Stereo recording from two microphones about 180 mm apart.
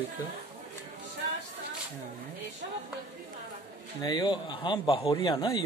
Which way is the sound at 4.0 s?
25° left (ahead or behind).